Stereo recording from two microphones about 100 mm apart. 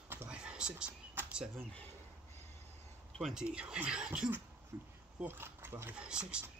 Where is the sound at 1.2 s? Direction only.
20° right (ahead or behind).